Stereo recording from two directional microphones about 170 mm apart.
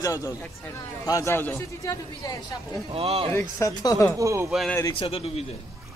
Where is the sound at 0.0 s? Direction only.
20° left (ahead or behind).